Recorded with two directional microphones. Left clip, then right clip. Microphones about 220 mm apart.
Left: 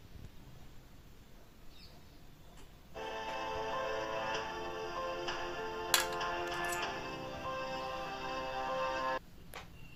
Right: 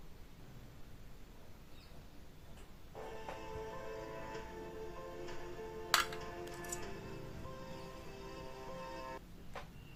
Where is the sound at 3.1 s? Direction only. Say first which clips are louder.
Left 9 dB; 30° left (ahead or behind).